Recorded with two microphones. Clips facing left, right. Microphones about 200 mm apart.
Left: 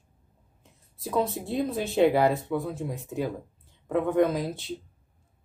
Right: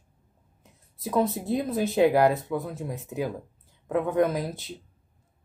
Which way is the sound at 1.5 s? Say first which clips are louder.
Right 2 dB; centre (ahead or behind).